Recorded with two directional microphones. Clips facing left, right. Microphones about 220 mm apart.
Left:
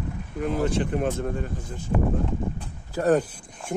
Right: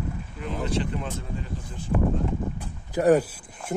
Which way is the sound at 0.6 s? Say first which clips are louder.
Left 2 dB; 50° left (ahead or behind).